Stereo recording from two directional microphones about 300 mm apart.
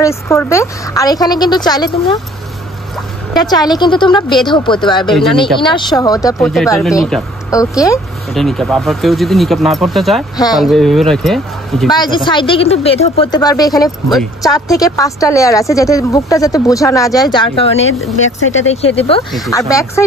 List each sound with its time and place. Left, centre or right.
0.0 s speech: centre
3.3 s speech: centre
6.7 s speech: centre
11.9 s speech: centre
17.7 s speech: left
18.9 s speech: centre